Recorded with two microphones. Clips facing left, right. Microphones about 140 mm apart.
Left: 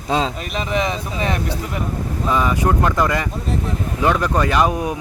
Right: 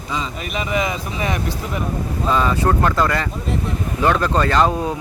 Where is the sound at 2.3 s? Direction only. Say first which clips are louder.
Even; 15° left (ahead or behind).